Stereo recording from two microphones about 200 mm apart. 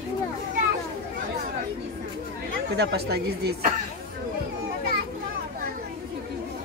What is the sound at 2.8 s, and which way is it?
Speech, 55° right (ahead or behind).